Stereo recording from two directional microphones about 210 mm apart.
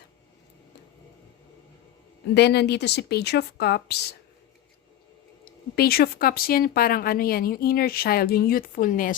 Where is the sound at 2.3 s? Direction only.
50° left (ahead or behind).